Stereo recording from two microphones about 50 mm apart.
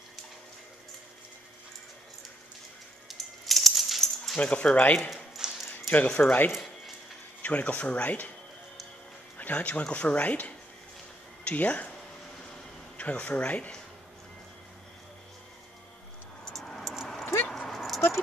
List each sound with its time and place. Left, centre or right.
3.1 s coin: centre
4.4 s speech: left
7.4 s speech: left
9.4 s speech: left
12.9 s speech: left
16.5 s a sound: centre
16.8 s dog: centre